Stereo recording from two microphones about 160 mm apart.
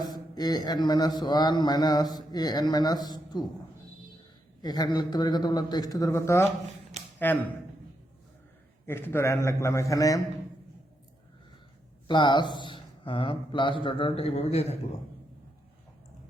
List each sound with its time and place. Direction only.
0.0 s a man's voice: 25° left (ahead or behind)
4.6 s a man's voice: 25° left (ahead or behind)
8.9 s a man's voice: 15° left (ahead or behind)
12.0 s a man's voice: 30° left (ahead or behind)